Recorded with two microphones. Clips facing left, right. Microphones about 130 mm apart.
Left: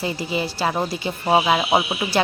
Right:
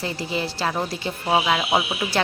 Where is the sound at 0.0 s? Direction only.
5° left (ahead or behind).